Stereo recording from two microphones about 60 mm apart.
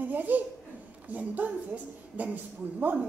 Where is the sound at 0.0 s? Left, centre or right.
Right.